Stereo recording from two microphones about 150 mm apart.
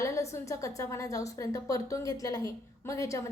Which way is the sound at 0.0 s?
20° left (ahead or behind).